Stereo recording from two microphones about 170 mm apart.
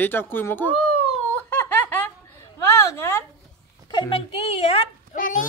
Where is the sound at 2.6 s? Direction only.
15° left (ahead or behind).